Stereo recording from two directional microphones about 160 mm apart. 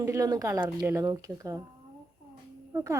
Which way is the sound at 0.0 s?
20° right (ahead or behind).